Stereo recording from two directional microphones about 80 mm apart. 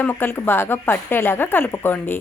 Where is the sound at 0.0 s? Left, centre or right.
Left.